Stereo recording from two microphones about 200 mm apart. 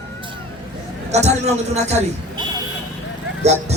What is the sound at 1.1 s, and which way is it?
Speech, 35° right (ahead or behind).